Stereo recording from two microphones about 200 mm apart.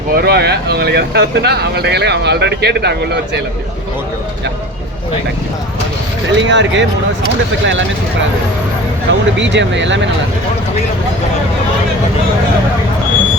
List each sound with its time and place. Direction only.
0.2 s speech: 55° right (ahead or behind)
6.3 s speech: 65° right (ahead or behind)
9.0 s speech: 65° right (ahead or behind)